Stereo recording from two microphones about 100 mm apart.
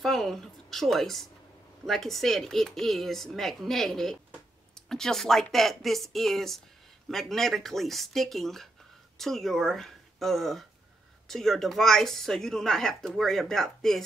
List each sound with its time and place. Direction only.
0.0 s a woman's voice: 5° left (ahead or behind)